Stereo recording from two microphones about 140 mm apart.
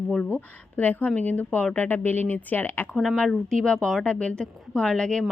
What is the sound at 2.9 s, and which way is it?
A woman's voice, centre (ahead or behind).